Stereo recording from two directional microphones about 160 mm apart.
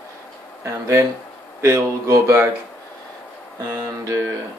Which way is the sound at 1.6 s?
20° right (ahead or behind).